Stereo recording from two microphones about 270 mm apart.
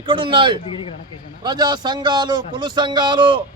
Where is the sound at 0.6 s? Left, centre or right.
Centre.